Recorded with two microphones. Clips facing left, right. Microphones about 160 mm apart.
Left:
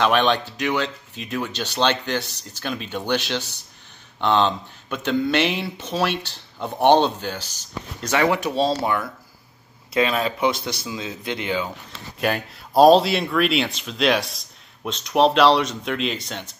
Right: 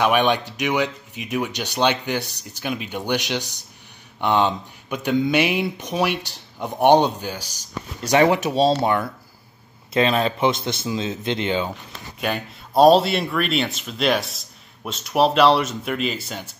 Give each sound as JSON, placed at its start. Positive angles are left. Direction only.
{"t": 0.0, "sound": "speech", "side_deg": -10}
{"t": 12.2, "sound": "speech", "side_deg": 0}